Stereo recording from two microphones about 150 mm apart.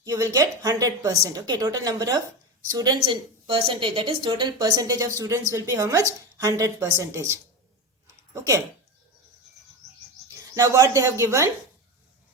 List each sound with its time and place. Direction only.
0.0 s a woman's voice: 25° right (ahead or behind)
10.5 s a woman's voice: 20° right (ahead or behind)